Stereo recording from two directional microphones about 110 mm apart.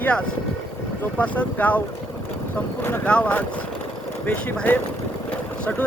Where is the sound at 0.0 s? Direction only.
10° left (ahead or behind).